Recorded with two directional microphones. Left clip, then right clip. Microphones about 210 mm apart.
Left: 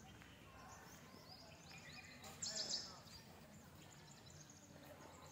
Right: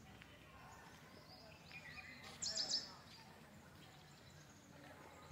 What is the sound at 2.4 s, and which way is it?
Bird, 50° right (ahead or behind).